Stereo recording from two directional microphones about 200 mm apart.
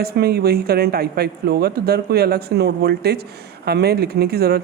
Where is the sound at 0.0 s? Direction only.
50° right (ahead or behind).